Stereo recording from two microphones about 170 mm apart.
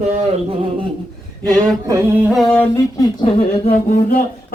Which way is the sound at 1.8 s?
20° right (ahead or behind).